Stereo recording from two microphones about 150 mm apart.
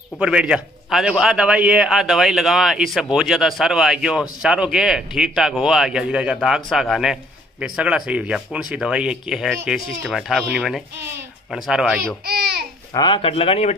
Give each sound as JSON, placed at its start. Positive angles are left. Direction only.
{"t": 0.2, "sound": "a man's voice", "side_deg": -5}
{"t": 12.9, "sound": "speech", "side_deg": 30}